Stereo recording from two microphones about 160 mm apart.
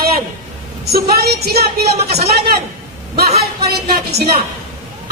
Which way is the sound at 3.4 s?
75° right (ahead or behind).